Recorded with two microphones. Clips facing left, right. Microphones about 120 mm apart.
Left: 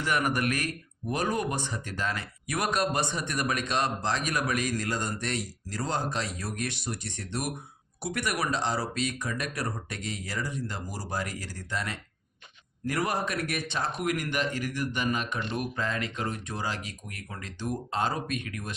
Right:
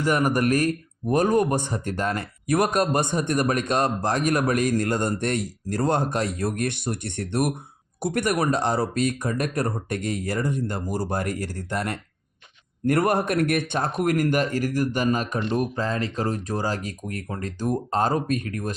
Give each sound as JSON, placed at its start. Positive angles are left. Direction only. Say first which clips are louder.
{"t": 0.0, "sound": "speech", "louder": "right 6 dB", "side_deg": -40}